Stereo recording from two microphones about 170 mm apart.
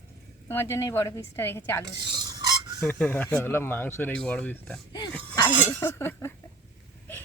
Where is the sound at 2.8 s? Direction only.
10° left (ahead or behind).